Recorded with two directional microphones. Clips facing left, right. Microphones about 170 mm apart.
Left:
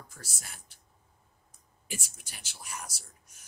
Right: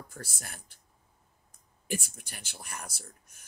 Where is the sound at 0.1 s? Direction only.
55° right (ahead or behind).